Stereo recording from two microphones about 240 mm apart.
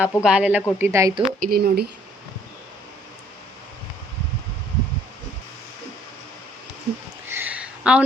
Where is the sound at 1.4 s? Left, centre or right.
Right.